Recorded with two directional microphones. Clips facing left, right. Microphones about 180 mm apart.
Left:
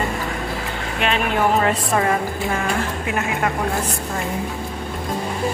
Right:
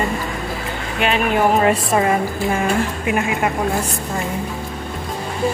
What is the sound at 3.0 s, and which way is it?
Speech, 15° right (ahead or behind).